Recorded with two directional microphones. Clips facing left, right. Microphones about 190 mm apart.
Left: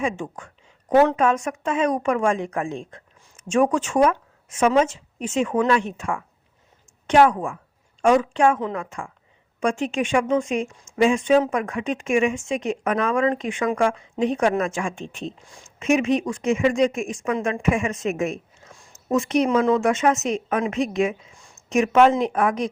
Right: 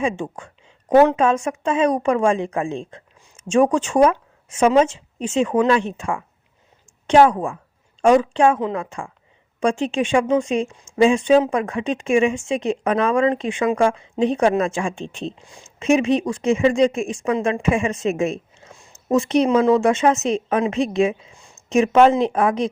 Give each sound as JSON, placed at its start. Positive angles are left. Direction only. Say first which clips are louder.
{"t": 0.0, "sound": "speech", "louder": "right 3 dB", "side_deg": -30}